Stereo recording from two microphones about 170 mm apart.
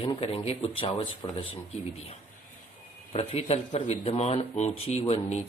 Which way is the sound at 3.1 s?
35° left (ahead or behind).